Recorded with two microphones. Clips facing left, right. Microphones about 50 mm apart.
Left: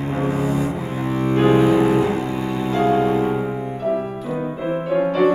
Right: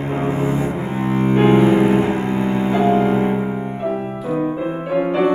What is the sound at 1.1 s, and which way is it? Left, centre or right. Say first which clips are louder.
Double bass: right 2 dB; right.